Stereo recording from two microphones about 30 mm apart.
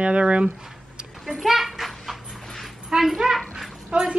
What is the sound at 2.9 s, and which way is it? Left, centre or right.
A woman's voice, right.